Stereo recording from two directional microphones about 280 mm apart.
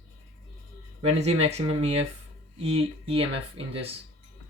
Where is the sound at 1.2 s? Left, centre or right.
Right.